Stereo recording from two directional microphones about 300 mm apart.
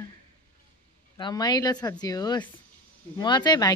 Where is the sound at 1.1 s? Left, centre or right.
Centre.